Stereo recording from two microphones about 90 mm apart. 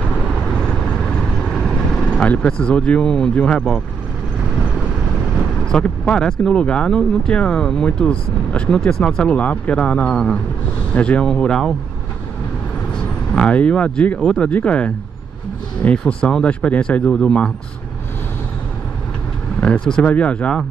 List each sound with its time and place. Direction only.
1.5 s speech: 5° left (ahead or behind)
5.7 s speech: 10° left (ahead or behind)
13.3 s speech: 10° left (ahead or behind)
16.1 s speech: 10° left (ahead or behind)
19.6 s speech: 10° left (ahead or behind)